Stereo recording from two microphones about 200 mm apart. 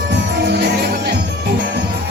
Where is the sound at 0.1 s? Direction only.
60° right (ahead or behind).